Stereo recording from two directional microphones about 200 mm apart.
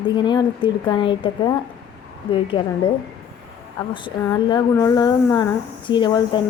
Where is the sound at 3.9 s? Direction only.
25° left (ahead or behind).